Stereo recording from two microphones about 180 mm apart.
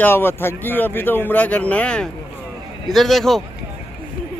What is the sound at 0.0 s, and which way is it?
Speech, 10° left (ahead or behind).